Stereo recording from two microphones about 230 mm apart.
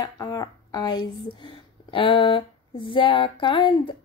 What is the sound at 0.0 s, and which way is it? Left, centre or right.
Speech, centre.